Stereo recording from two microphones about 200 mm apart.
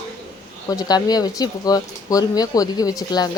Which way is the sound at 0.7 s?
20° left (ahead or behind).